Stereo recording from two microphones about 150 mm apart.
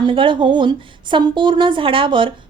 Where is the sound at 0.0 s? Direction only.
35° right (ahead or behind).